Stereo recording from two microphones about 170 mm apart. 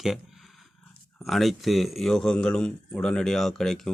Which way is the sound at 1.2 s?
Centre (ahead or behind).